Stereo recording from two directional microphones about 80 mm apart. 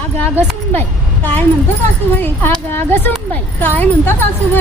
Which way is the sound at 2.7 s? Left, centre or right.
Left.